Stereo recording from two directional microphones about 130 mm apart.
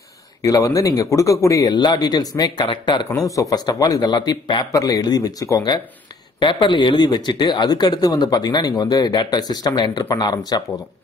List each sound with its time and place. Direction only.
0.4 s speech: 25° left (ahead or behind)
3.1 s speech: 25° left (ahead or behind)